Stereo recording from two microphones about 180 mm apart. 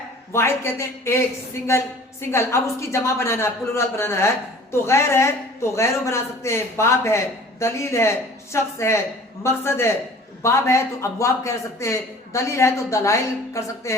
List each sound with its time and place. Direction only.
0.3 s a man's voice: 15° left (ahead or behind)
2.3 s a man's voice: 15° left (ahead or behind)